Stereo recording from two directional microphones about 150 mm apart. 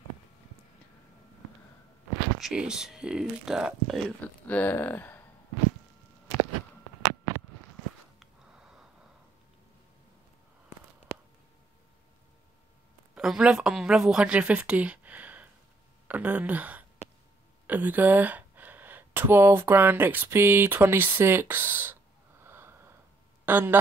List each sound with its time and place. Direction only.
2.4 s speech: 5° right (ahead or behind)
4.5 s speech: 10° left (ahead or behind)
8.2 s sniff: 5° right (ahead or behind)
13.1 s a woman's voice: 5° right (ahead or behind)
22.4 s wheeze: 15° right (ahead or behind)
23.4 s speech: 15° right (ahead or behind)